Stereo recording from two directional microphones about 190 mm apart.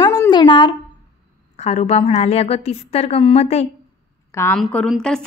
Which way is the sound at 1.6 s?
35° left (ahead or behind).